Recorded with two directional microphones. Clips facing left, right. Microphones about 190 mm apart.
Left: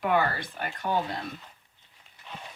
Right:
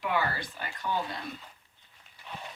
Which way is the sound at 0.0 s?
50° left (ahead or behind).